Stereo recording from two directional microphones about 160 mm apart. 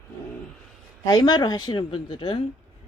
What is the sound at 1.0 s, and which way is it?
Speech, 25° left (ahead or behind).